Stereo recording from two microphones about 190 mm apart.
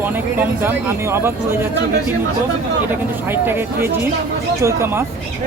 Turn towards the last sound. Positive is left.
turn(degrees=-15)  # may be behind; listen again after turning